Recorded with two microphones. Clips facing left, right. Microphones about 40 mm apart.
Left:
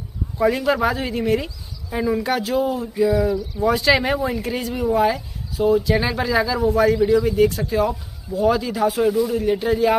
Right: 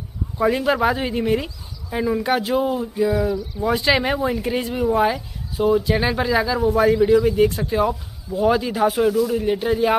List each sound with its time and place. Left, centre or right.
0.4 s speech: centre
2.2 s speech: centre